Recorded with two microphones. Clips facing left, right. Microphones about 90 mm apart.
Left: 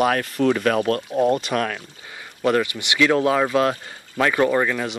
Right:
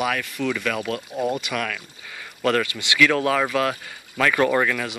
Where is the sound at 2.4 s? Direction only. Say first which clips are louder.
Left 2 dB; 20° left (ahead or behind).